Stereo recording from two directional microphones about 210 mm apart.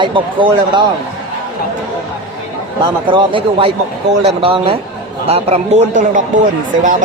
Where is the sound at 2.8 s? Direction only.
25° right (ahead or behind).